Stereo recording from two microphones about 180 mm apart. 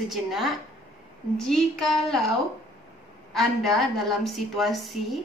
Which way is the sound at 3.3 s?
Centre (ahead or behind).